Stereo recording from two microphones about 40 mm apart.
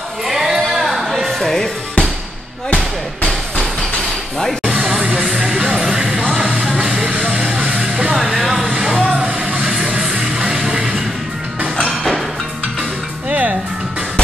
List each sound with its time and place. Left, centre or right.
0.3 s music: centre
1.2 s music: centre
3.3 s hammer: centre
5.0 s music: right
6.2 s music: right
8.2 s music: centre
9.0 s music: right
10.7 s music: right
11.9 s music: centre
13.3 s music: right